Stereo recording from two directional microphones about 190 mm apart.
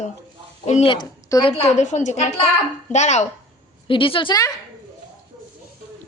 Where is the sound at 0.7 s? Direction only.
30° left (ahead or behind).